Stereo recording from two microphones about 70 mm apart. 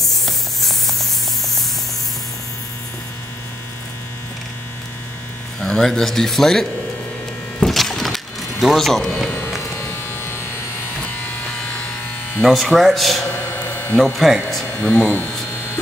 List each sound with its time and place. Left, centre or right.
0.0 s spray: centre
5.6 s speech: centre
7.6 s a sound: centre
9.8 s electric shaver: left
11.0 s electric shaver: centre
12.4 s speech: centre
14.8 s speech: left